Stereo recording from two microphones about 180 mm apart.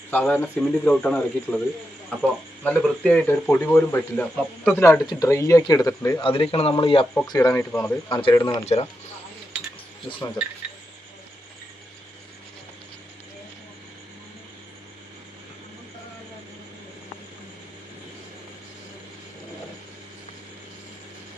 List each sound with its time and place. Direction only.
0.1 s speech: 10° left (ahead or behind)
2.6 s speech: 5° left (ahead or behind)
4.8 s speech: 15° left (ahead or behind)
6.2 s a man's voice: 30° left (ahead or behind)
7.3 s speech: 15° left (ahead or behind)
8.1 s a man's voice: 30° left (ahead or behind)
8.4 s speech: 15° left (ahead or behind)
8.6 s speech: 35° left (ahead or behind)